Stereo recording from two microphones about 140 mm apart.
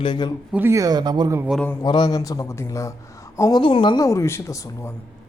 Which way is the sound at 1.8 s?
30° left (ahead or behind).